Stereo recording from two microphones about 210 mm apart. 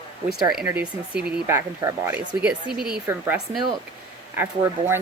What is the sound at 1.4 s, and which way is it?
Speech, 15° right (ahead or behind).